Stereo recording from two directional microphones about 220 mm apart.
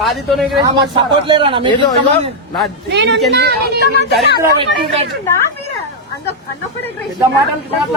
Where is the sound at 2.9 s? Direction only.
50° right (ahead or behind).